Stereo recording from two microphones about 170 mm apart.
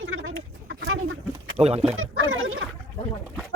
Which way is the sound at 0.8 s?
90° right.